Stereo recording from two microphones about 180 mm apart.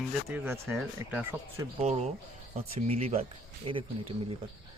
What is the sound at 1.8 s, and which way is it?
Speech, 35° right (ahead or behind).